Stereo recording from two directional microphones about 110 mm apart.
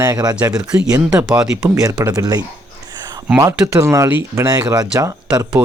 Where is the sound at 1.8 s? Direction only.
35° right (ahead or behind).